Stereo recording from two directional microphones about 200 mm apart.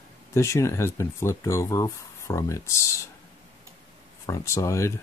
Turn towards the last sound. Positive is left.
turn(degrees=15)  # may be behind; listen again after turning